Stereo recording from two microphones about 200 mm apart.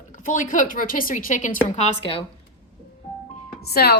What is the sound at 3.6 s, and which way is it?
Speech, 50° left (ahead or behind).